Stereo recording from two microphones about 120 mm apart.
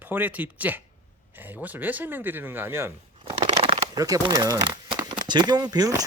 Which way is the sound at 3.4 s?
50° right (ahead or behind).